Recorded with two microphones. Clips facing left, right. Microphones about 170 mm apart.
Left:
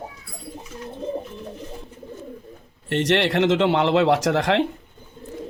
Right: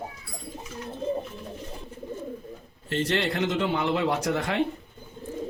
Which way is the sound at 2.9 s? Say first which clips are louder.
Left 6 dB; 80° left.